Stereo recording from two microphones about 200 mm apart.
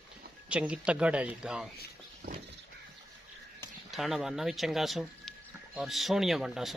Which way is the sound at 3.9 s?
Centre (ahead or behind).